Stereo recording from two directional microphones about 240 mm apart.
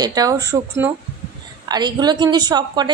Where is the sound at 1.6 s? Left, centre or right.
Centre.